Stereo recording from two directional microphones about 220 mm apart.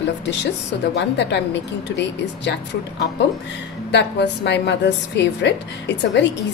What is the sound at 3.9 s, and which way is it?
A woman's voice, 50° left (ahead or behind).